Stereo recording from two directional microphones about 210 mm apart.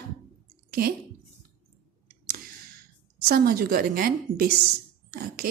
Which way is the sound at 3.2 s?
45° right (ahead or behind).